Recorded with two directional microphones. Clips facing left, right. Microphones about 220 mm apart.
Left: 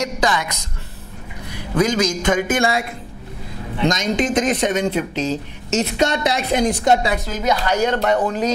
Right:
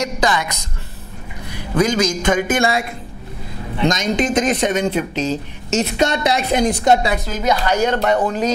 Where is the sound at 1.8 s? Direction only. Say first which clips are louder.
Right 1 dB; 10° right (ahead or behind).